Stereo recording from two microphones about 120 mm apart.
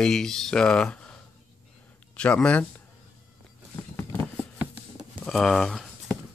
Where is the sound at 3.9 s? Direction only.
20° left (ahead or behind).